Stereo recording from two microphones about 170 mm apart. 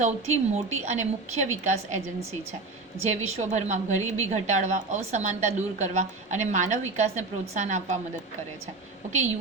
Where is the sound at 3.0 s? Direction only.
40° right (ahead or behind).